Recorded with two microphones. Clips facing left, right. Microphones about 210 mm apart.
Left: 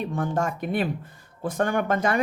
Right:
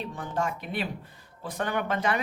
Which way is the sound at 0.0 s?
50° left (ahead or behind).